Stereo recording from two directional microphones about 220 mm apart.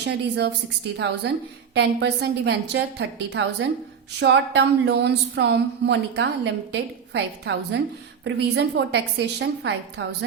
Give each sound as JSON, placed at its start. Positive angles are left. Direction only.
{"t": 0.0, "sound": "a woman's voice", "side_deg": -50}